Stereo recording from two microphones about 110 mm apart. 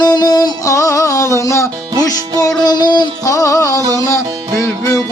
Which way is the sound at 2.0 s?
35° left (ahead or behind).